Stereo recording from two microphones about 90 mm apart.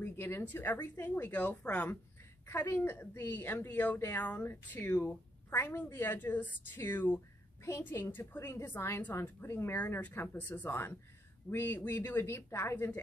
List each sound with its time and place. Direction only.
0.0 s a sound: 25° left (ahead or behind)
0.5 s a woman's voice: 20° left (ahead or behind)
2.4 s a woman's voice: 30° left (ahead or behind)